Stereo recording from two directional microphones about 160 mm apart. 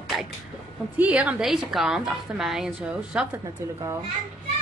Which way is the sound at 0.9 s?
10° right (ahead or behind).